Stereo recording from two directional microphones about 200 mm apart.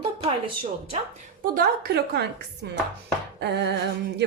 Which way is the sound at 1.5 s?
50° right (ahead or behind).